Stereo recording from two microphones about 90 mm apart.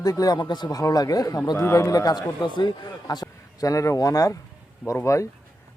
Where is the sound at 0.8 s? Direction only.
40° left (ahead or behind).